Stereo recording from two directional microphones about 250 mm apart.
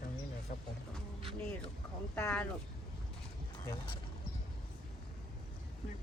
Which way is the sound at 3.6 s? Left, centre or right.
Centre.